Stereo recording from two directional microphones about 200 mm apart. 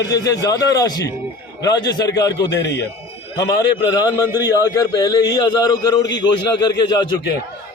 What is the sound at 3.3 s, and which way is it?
A man's voice, 20° left (ahead or behind).